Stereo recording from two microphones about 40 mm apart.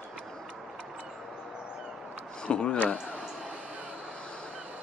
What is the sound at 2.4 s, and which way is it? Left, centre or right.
Speech, left.